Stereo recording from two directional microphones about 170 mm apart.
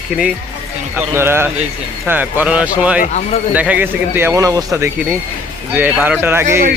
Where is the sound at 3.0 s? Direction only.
40° left (ahead or behind).